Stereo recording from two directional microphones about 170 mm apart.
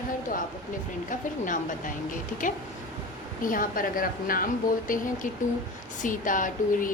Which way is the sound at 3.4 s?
55° left (ahead or behind).